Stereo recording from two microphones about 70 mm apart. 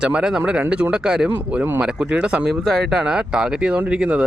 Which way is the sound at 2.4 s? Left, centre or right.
Centre.